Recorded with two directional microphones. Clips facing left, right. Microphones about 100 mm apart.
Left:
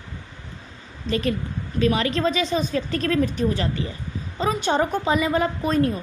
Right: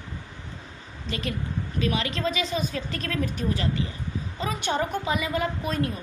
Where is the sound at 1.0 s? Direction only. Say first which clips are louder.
Left 7 dB; 35° left (ahead or behind).